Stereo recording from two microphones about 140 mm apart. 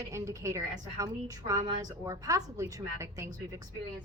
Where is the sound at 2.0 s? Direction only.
25° right (ahead or behind).